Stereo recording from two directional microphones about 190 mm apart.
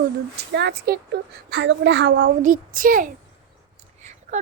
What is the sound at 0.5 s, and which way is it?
A woman's voice, 60° right (ahead or behind).